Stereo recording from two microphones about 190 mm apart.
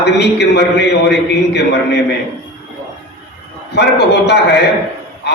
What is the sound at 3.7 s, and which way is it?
Speech, 60° left (ahead or behind).